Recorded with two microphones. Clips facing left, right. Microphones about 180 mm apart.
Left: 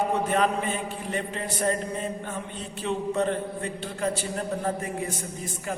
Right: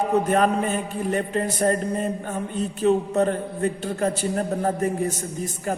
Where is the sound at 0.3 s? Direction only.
45° right (ahead or behind).